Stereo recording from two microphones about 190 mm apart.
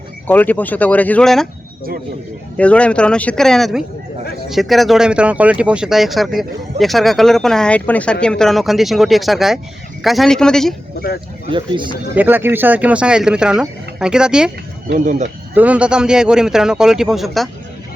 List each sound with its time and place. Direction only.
0.3 s speech: 10° left (ahead or behind)
2.6 s speech: 5° left (ahead or behind)
11.5 s speech: 25° right (ahead or behind)
12.1 s speech: 10° right (ahead or behind)
14.9 s speech: 40° right (ahead or behind)
15.5 s speech: 5° right (ahead or behind)